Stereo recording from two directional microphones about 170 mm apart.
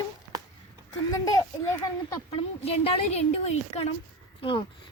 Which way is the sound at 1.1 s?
20° left (ahead or behind).